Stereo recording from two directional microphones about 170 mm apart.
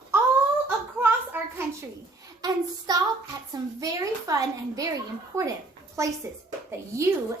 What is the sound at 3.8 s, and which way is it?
A woman's voice, 20° right (ahead or behind).